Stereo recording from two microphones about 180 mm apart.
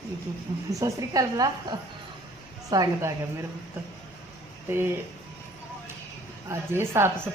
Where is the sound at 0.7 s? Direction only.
20° right (ahead or behind).